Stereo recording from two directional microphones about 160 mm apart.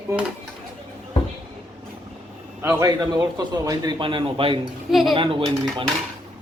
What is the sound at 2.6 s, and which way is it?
A man's voice, 20° right (ahead or behind).